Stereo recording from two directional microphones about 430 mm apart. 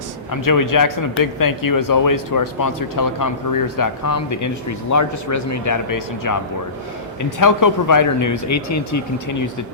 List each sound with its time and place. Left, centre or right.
0.3 s speech: left